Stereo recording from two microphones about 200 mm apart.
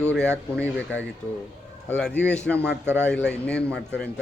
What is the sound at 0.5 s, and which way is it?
Speech, 5° left (ahead or behind).